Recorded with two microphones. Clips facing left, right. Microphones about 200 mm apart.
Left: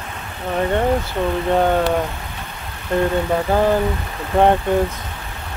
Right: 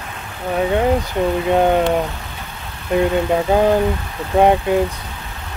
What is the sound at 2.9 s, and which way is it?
Speech, 15° right (ahead or behind).